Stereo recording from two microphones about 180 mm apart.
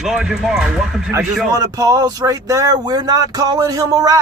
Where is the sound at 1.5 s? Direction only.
20° right (ahead or behind).